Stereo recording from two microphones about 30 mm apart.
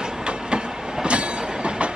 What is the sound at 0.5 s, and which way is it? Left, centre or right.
Train, right.